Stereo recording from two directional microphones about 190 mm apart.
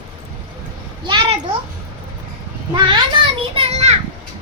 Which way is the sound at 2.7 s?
25° right (ahead or behind).